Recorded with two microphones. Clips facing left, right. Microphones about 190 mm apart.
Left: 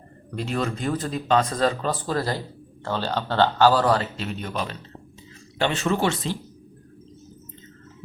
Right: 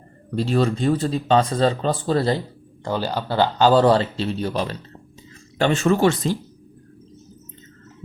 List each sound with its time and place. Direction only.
0.3 s speech: 30° right (ahead or behind)
2.8 s speech: 10° right (ahead or behind)
3.7 s speech: 25° right (ahead or behind)
5.5 s speech: 45° right (ahead or behind)